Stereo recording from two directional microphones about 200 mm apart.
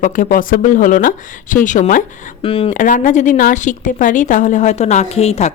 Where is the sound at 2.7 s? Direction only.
40° left (ahead or behind).